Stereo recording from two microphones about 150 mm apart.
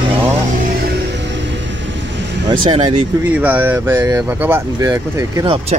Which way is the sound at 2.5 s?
35° right (ahead or behind).